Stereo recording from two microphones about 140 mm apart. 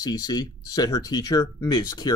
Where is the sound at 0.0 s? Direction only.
25° left (ahead or behind).